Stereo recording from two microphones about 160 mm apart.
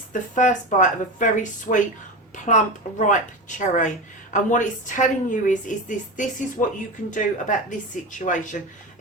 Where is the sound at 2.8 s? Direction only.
50° left (ahead or behind).